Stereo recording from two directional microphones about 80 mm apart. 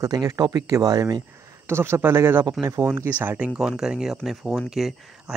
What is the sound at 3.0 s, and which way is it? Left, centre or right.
Speech, centre.